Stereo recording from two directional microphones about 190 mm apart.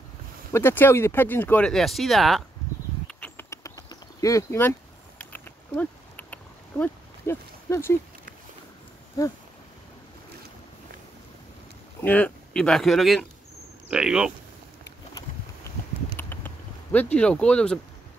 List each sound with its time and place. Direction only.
0.5 s speech: 10° left (ahead or behind)
3.1 s bird: 10° left (ahead or behind)
5.2 s a sound: 10° left (ahead or behind)
9.2 s speech: 20° left (ahead or behind)
12.0 s speech: 5° left (ahead or behind)
15.7 s a sound: 15° left (ahead or behind)